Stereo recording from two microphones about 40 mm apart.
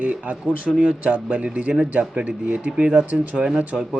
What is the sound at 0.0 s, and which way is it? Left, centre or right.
A man's voice, right.